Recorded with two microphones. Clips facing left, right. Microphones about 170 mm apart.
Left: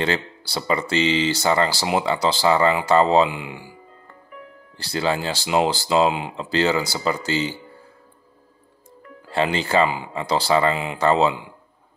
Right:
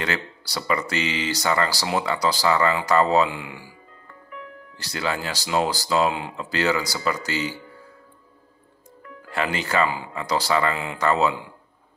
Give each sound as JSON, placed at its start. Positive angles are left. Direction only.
{"t": 0.0, "sound": "speech", "side_deg": 30}
{"t": 4.7, "sound": "speech", "side_deg": 30}
{"t": 9.3, "sound": "speech", "side_deg": 30}